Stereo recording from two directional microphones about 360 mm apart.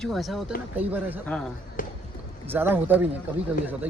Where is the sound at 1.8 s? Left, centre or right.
Left.